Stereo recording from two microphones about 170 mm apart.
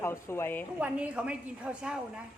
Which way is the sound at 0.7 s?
10° right (ahead or behind).